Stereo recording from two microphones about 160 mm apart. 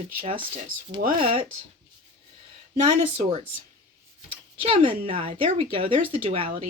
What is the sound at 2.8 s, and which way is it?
Speech, 40° right (ahead or behind).